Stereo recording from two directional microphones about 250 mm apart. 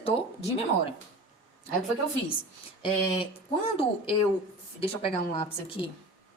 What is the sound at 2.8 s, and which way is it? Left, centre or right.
Speech, left.